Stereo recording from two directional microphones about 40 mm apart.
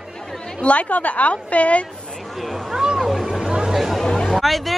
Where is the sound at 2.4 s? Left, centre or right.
Centre.